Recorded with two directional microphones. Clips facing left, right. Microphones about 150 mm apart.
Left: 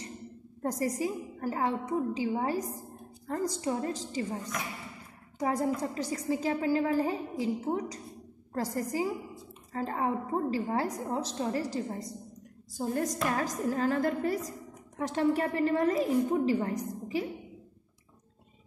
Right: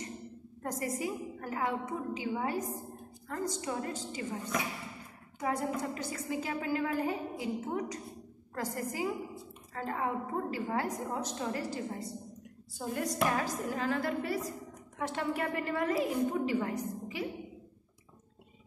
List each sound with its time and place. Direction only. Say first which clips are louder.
0.6 s a woman's voice: left 5 dB; 35° left (ahead or behind)
5.4 s a woman's voice: left 4 dB; 35° left (ahead or behind)